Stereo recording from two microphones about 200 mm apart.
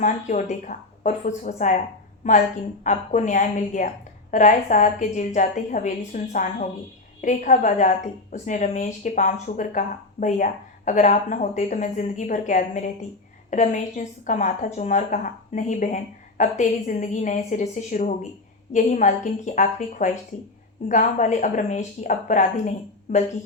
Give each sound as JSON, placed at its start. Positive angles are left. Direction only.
{"t": 0.0, "sound": "a woman's voice", "side_deg": 40}
{"t": 2.8, "sound": "a woman's voice", "side_deg": 40}